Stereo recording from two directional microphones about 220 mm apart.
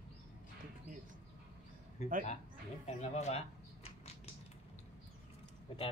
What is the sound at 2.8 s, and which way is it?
Speech, 30° left (ahead or behind).